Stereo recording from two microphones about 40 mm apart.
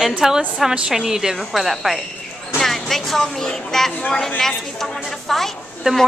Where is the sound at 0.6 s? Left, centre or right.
Centre.